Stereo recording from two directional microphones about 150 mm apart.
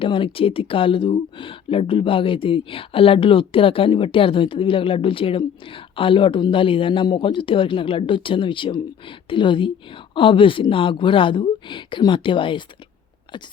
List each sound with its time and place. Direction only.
0.0 s speech: 35° left (ahead or behind)